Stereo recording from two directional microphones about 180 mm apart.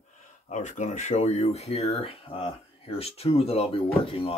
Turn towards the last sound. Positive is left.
turn(degrees=30)  # may be behind; listen again after turning